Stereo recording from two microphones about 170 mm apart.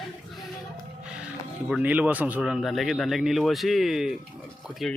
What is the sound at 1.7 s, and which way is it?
Speech, 10° right (ahead or behind).